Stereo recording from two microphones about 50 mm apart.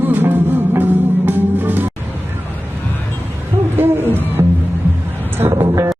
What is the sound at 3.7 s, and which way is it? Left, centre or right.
Hoot, right.